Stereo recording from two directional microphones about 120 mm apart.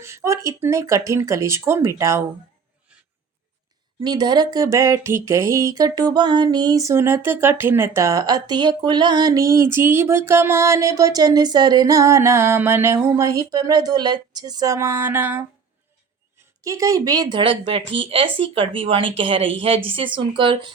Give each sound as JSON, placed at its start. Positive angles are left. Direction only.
{"t": 0.0, "sound": "speech", "side_deg": -25}
{"t": 4.0, "sound": "speech", "side_deg": -35}
{"t": 16.6, "sound": "speech", "side_deg": -30}